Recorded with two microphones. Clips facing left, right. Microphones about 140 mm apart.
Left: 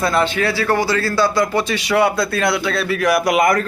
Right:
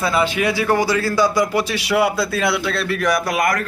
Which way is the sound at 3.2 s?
20° left (ahead or behind).